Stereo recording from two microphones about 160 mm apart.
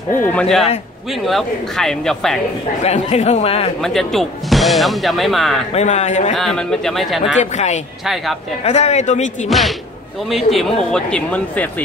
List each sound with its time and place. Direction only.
0.1 s speech: 10° left (ahead or behind)
2.8 s speech: 45° left (ahead or behind)
3.8 s speech: centre (ahead or behind)
5.7 s speech: 45° left (ahead or behind)
6.3 s speech: 5° left (ahead or behind)
7.3 s speech: 45° left (ahead or behind)
8.0 s speech: centre (ahead or behind)
8.6 s speech: 45° left (ahead or behind)
9.5 s speech: centre (ahead or behind)